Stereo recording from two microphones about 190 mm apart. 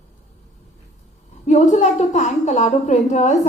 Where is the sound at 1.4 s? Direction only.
35° left (ahead or behind).